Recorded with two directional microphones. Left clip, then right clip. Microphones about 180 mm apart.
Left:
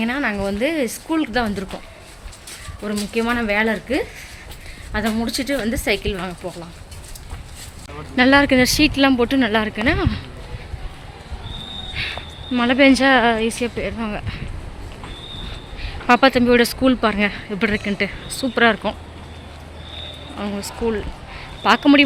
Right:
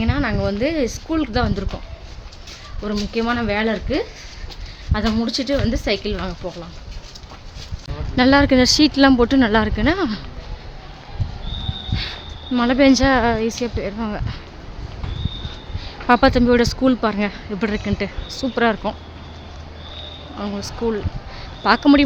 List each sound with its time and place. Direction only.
0.0 s speech: 5° right (ahead or behind)
2.8 s speech: 5° right (ahead or behind)
8.1 s speech: 10° right (ahead or behind)
12.5 s speech: 5° right (ahead or behind)
14.0 s speech: 10° right (ahead or behind)
15.8 s speech: 10° right (ahead or behind)
20.4 s speech: centre (ahead or behind)